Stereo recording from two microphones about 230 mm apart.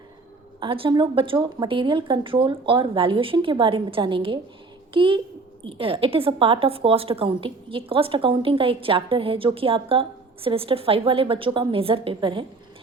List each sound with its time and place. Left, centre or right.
0.6 s a woman's voice: right